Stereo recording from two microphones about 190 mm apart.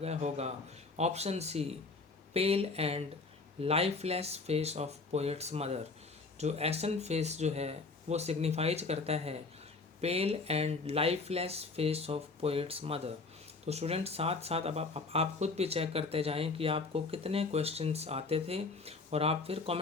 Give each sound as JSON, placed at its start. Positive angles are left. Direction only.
{"t": 0.0, "sound": "speech", "side_deg": -35}